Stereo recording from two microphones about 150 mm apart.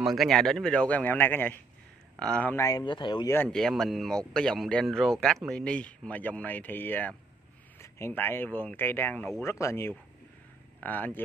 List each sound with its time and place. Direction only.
0.0 s speech: centre (ahead or behind)
2.6 s speech: 30° left (ahead or behind)
3.4 s speech: centre (ahead or behind)